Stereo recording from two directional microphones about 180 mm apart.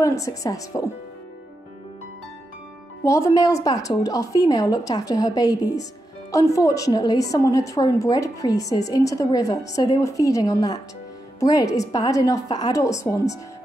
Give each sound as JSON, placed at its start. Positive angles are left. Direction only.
{"t": 0.0, "sound": "a woman's voice", "side_deg": 15}
{"t": 3.0, "sound": "a woman's voice", "side_deg": 15}